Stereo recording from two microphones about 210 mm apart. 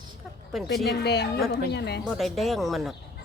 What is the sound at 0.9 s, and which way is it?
A woman's voice, 50° left (ahead or behind).